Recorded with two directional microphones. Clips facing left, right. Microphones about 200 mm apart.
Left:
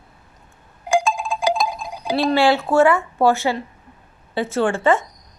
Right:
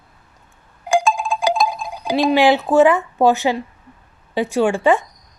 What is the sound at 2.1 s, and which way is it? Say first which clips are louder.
Speech: right 2 dB; 15° right (ahead or behind).